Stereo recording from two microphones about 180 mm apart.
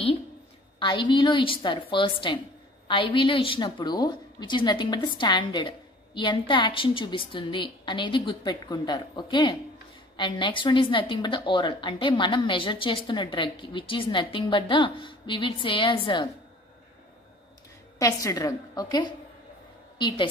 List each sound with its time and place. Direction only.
0.7 s a woman's voice: 25° left (ahead or behind)
17.9 s a woman's voice: 20° left (ahead or behind)